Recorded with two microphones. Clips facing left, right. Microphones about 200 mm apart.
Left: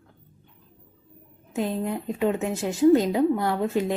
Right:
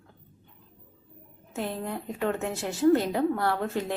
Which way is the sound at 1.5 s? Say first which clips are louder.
Left 5 dB; 15° left (ahead or behind).